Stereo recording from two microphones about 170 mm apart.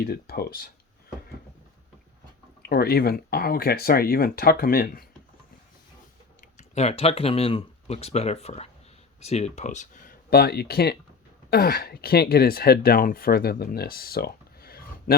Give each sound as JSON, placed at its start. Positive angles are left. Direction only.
{"t": 0.0, "sound": "speech", "side_deg": 65}
{"t": 2.6, "sound": "speech", "side_deg": 70}
{"t": 6.6, "sound": "speech", "side_deg": 40}